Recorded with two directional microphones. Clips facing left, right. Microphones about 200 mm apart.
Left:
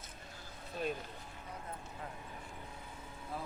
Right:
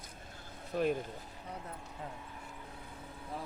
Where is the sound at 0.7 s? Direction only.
60° right (ahead or behind).